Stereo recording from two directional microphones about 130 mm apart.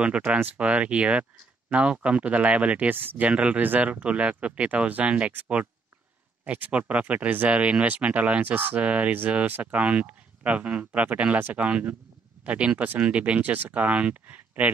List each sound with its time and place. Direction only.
0.0 s speech: 10° right (ahead or behind)